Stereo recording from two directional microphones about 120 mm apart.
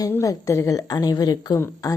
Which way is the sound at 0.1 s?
30° left (ahead or behind).